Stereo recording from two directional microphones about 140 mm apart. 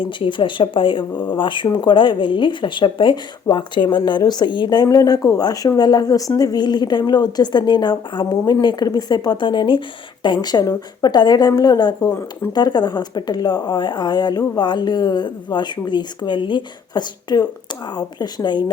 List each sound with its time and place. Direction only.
0.0 s a woman's voice: 35° left (ahead or behind)